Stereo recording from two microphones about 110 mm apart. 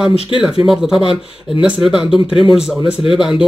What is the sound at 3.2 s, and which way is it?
Speech, 5° right (ahead or behind).